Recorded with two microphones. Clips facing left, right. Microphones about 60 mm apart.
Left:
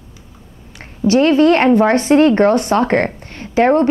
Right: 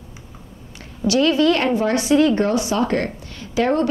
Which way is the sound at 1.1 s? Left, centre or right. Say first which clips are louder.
Left 5 dB; left.